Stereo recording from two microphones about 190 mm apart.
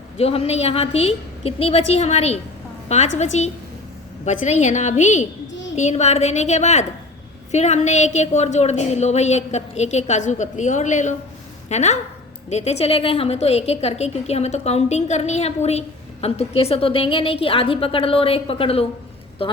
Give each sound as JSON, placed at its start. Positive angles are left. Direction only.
{"t": 0.2, "sound": "a woman's voice", "side_deg": 30}
{"t": 4.3, "sound": "a woman's voice", "side_deg": 35}
{"t": 5.5, "sound": "a sound", "side_deg": 75}
{"t": 5.7, "sound": "a woman's voice", "side_deg": 35}